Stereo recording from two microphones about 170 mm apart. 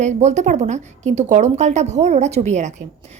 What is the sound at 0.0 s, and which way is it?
A woman's voice, 45° right (ahead or behind).